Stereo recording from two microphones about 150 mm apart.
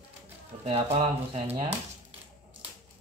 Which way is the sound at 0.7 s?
40° right (ahead or behind).